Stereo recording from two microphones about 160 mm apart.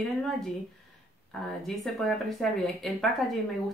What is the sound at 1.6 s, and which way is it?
Speech, centre (ahead or behind).